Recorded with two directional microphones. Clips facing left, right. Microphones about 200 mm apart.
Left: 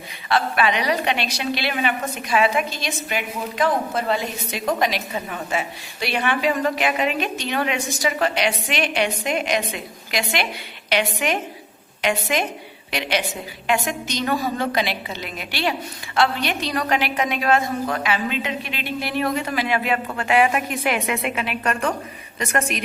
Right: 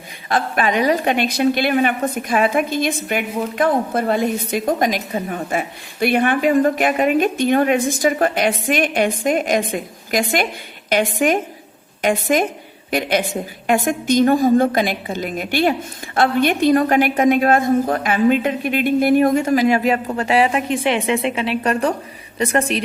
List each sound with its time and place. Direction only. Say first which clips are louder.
0.3 s a woman's voice: right 1 dB; 45° right (ahead or behind)